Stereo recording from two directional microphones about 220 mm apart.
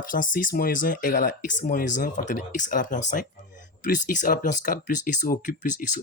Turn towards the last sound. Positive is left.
turn(degrees=35)  # may be behind; listen again after turning